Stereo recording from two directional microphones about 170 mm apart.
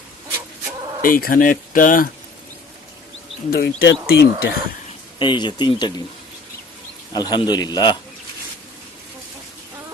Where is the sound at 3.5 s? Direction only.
65° left (ahead or behind).